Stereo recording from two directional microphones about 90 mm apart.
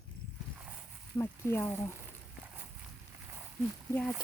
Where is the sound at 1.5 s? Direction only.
25° left (ahead or behind).